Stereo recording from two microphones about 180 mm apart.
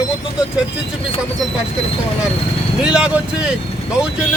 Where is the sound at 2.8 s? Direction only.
5° right (ahead or behind).